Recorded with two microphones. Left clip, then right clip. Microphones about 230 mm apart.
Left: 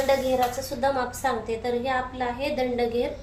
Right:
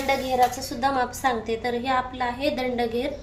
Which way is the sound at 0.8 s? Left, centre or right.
Right.